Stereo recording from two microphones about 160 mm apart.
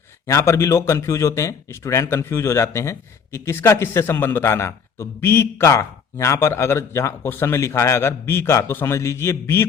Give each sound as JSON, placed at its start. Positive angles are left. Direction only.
{"t": 0.3, "sound": "speech", "side_deg": 20}